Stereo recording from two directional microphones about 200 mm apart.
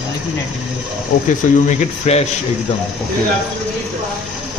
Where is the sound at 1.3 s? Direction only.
35° left (ahead or behind).